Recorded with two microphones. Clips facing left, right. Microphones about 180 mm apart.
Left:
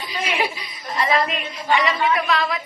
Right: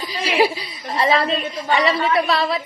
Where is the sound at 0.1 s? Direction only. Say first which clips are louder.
Right 6 dB; 35° right (ahead or behind).